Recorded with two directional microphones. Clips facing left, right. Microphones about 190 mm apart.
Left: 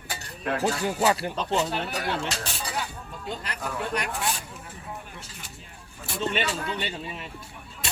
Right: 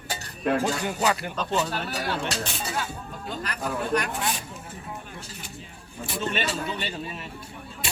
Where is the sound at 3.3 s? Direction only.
25° left (ahead or behind).